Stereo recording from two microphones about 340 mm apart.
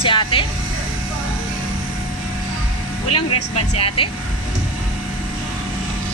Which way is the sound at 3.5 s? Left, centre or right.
Centre.